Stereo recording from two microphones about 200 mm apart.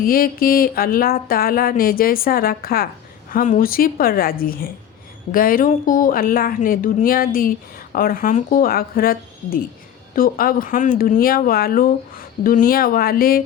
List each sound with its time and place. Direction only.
0.0 s speech: 45° left (ahead or behind)